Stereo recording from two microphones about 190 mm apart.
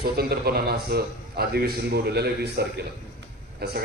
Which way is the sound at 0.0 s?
55° right (ahead or behind).